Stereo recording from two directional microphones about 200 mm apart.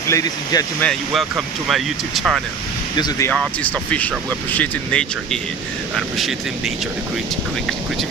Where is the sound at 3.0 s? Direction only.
15° left (ahead or behind).